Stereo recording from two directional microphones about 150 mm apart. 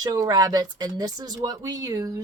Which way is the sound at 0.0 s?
25° right (ahead or behind).